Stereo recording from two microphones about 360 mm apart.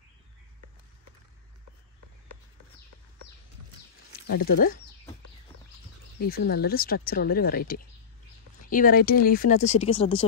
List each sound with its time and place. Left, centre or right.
4.3 s speech: left
6.1 s speech: left